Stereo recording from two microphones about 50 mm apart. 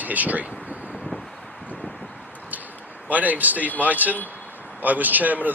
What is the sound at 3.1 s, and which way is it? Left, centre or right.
Speech, right.